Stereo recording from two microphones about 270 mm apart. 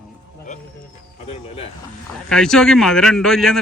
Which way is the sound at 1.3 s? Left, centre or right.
Left.